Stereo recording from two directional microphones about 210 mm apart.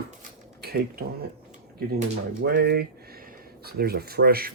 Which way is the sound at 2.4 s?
50° right (ahead or behind).